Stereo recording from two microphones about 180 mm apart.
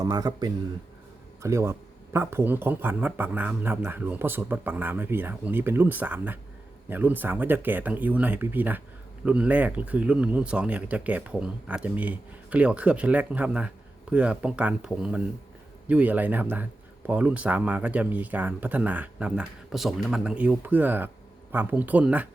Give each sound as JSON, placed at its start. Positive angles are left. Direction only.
{"t": 0.0, "sound": "speech", "side_deg": -20}